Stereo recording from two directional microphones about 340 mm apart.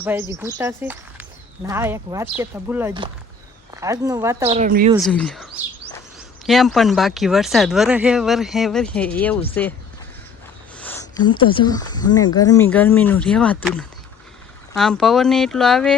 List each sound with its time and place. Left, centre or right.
0.0 s speech: centre
4.6 s a woman's voice: right
4.9 s speech: centre
10.8 s a sound: centre
11.4 s speech: centre